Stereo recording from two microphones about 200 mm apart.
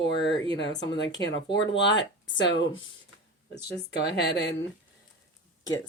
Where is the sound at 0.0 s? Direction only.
60° left (ahead or behind).